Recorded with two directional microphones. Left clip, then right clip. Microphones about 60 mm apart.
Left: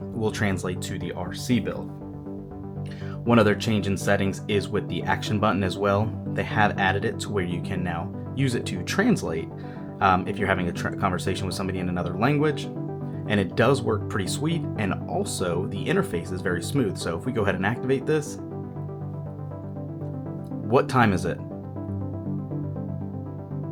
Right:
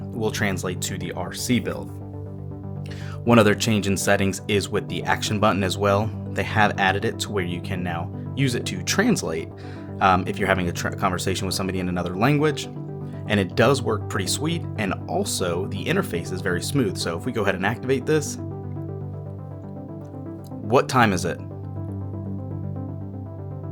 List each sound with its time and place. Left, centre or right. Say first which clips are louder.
0.2 s speech: right 2 dB; right
0.9 s speech: right 2 dB; right
3.2 s speech: right 3 dB; right
20.7 s speech: right 2 dB; right